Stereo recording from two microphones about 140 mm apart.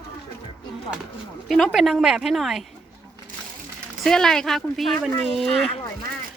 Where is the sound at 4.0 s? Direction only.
5° left (ahead or behind).